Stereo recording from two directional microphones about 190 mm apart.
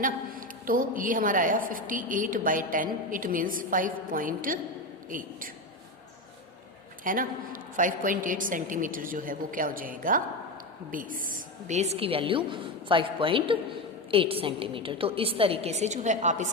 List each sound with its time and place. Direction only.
0.0 s a woman's voice: 45° right (ahead or behind)
7.0 s a woman's voice: 45° right (ahead or behind)